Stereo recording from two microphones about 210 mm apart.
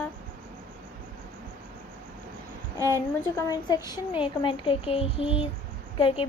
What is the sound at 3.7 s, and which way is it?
A woman's voice, 20° left (ahead or behind).